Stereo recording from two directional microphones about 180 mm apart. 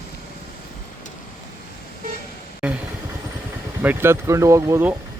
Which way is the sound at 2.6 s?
5° right (ahead or behind).